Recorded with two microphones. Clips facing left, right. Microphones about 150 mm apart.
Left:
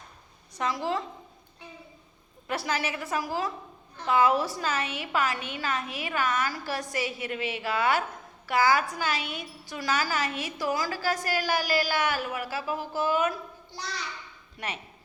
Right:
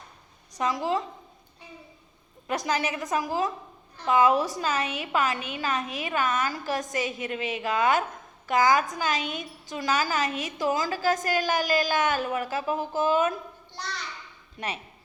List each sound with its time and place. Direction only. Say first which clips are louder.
0.5 s a woman's voice: right 3 dB; 15° right (ahead or behind)
2.5 s a woman's voice: right 3 dB; 15° right (ahead or behind)